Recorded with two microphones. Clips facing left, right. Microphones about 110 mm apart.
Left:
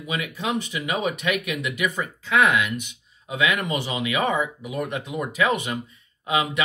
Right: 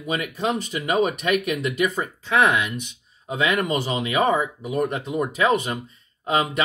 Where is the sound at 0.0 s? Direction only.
45° right (ahead or behind).